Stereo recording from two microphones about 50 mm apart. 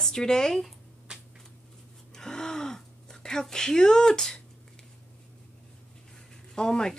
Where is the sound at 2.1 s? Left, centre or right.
Centre.